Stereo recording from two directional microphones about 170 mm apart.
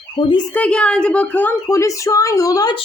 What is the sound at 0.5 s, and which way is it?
A woman's voice, 5° left (ahead or behind).